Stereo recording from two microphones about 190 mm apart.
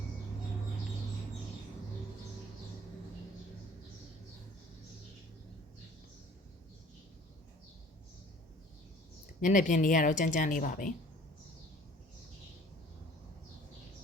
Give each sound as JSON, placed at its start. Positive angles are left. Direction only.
{"t": 9.4, "sound": "speech", "side_deg": 40}